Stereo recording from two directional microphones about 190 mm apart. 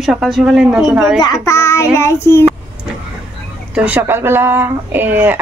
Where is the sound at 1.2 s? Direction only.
15° left (ahead or behind).